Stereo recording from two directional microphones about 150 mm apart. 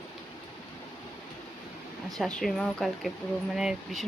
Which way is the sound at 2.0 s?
Centre (ahead or behind).